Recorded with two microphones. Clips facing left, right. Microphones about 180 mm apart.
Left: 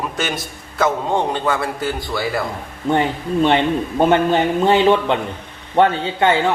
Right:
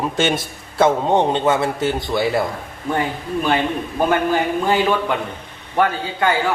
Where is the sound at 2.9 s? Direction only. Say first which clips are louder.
Left 4 dB; 25° left (ahead or behind).